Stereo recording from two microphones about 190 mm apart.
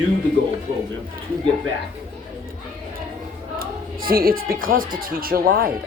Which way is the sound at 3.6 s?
50° right (ahead or behind).